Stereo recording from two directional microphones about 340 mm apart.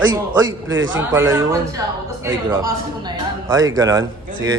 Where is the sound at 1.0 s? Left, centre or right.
Centre.